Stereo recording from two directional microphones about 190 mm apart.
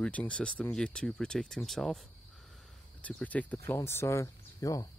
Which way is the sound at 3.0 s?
5° left (ahead or behind).